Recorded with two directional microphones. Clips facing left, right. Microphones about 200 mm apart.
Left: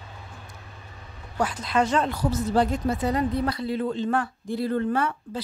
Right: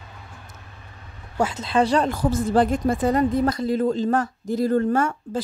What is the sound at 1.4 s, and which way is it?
Speech, 25° right (ahead or behind).